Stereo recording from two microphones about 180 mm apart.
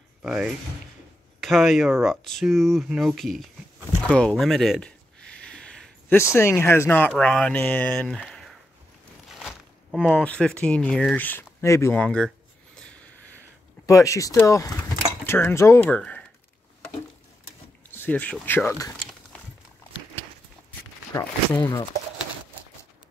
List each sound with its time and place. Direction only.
0.2 s speech: 5° right (ahead or behind)
4.1 s a sound: 5° left (ahead or behind)
6.3 s speech: 15° left (ahead or behind)
13.8 s speech: 15° left (ahead or behind)
16.0 s a sound: 5° left (ahead or behind)
17.9 s speech: 10° left (ahead or behind)
21.1 s speech: 15° left (ahead or behind)